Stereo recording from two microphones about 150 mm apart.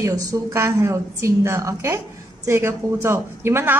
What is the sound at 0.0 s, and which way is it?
A woman's voice, 20° right (ahead or behind).